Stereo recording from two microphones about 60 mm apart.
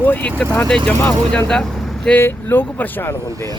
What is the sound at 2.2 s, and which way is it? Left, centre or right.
Speech, left.